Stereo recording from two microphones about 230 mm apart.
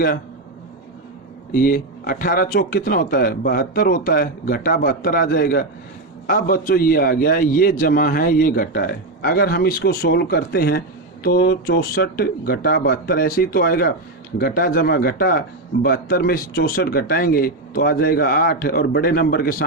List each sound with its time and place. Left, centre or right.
1.5 s a man's voice: left